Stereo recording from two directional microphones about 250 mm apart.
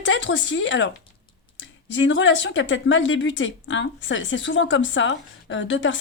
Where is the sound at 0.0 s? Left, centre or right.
Left.